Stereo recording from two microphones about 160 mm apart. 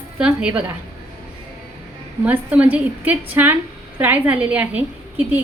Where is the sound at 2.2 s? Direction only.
10° right (ahead or behind).